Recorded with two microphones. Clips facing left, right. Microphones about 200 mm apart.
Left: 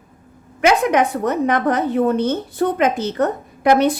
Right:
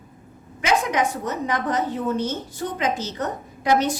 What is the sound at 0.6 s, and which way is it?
A woman's voice, 60° left (ahead or behind).